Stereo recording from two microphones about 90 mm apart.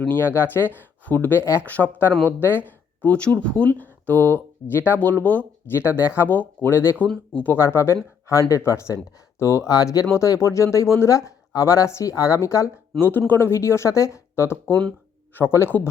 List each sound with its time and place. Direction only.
0.1 s speech: 25° left (ahead or behind)
1.6 s speech: 15° left (ahead or behind)
9.6 s speech: 40° left (ahead or behind)
13.0 s speech: 20° left (ahead or behind)